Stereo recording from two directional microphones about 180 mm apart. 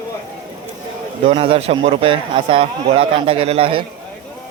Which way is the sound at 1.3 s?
30° right (ahead or behind).